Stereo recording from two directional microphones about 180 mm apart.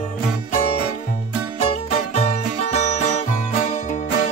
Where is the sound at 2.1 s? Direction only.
35° left (ahead or behind).